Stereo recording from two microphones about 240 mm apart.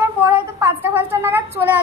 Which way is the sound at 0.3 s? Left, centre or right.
Centre.